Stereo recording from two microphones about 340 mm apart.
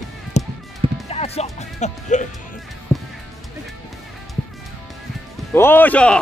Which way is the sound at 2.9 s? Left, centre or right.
Centre.